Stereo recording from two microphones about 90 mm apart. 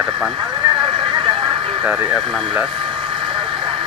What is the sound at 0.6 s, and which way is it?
Vehicle, 70° right (ahead or behind).